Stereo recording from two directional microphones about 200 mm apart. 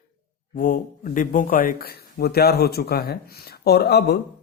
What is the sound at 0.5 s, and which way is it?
Speech, 45° left (ahead or behind).